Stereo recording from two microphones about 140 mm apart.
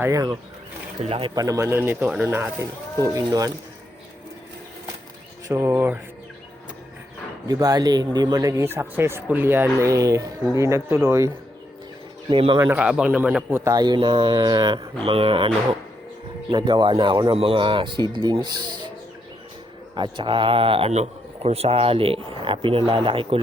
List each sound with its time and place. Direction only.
0.0 s speech: 25° right (ahead or behind)
1.0 s speech: 45° right (ahead or behind)
1.4 s a man's voice: 25° right (ahead or behind)
5.5 s a man's voice: 20° right (ahead or behind)
7.4 s speech: 25° right (ahead or behind)
12.3 s speech: 35° right (ahead or behind)
12.7 s a man's voice: 5° right (ahead or behind)
13.7 s speech: 30° right (ahead or behind)
20.0 s speech: 35° right (ahead or behind)